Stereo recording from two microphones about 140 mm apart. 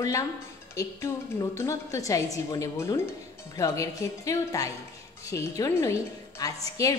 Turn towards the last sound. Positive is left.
turn(degrees=25)  # may be behind; listen again after turning